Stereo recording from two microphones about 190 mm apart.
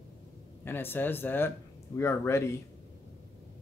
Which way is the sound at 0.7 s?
10° left (ahead or behind).